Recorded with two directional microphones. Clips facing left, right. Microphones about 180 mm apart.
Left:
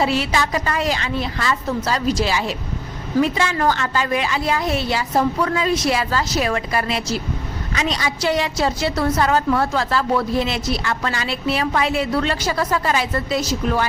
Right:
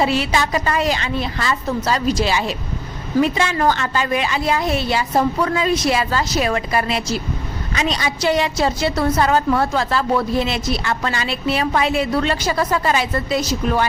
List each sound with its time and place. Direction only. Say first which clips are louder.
0.0 s a woman's voice: right 1 dB; 20° right (ahead or behind)